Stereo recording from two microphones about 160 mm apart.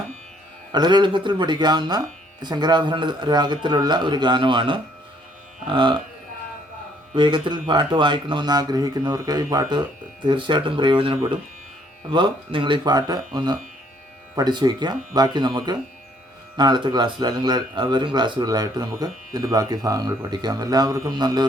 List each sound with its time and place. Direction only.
0.7 s speech: 25° right (ahead or behind)
7.1 s speech: 30° right (ahead or behind)